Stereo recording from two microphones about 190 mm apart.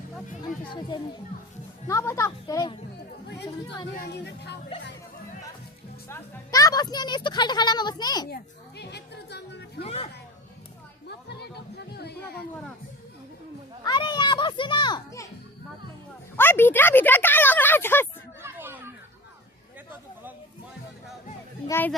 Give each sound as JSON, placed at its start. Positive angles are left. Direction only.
{"t": 0.7, "sound": "a woman's voice", "side_deg": 25}
{"t": 3.9, "sound": "speech", "side_deg": 60}
{"t": 6.1, "sound": "a woman's voice", "side_deg": 15}
{"t": 8.8, "sound": "music", "side_deg": 60}
{"t": 9.8, "sound": "speech", "side_deg": 30}
{"t": 11.3, "sound": "music", "side_deg": 60}
{"t": 11.9, "sound": "a sound", "side_deg": 55}
{"t": 13.8, "sound": "children playing", "side_deg": 25}
{"t": 16.4, "sound": "speech", "side_deg": 10}
{"t": 18.4, "sound": "chatter", "side_deg": -10}
{"t": 21.7, "sound": "speech", "side_deg": 10}